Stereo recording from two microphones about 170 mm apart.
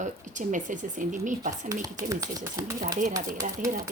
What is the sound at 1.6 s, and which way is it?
Speech, 20° right (ahead or behind).